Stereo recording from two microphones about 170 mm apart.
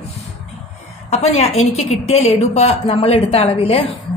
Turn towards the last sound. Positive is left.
turn(degrees=35)  # may be behind; listen again after turning